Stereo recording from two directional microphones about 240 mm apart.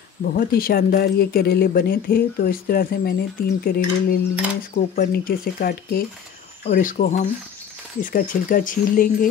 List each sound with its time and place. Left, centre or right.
0.2 s speech: left